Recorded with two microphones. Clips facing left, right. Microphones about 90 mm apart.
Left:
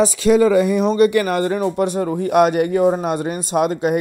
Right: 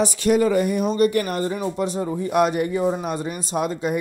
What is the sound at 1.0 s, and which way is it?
Speech, 90° left.